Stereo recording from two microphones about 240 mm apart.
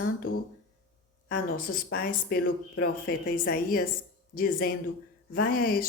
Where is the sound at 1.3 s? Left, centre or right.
Left.